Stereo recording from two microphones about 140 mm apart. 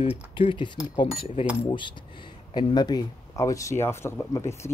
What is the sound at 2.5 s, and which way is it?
Speech, 35° left (ahead or behind).